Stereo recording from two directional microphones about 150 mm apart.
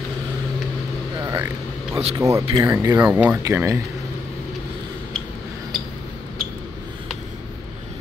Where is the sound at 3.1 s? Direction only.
10° right (ahead or behind).